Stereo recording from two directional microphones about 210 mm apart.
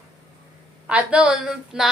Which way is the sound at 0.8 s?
5° right (ahead or behind).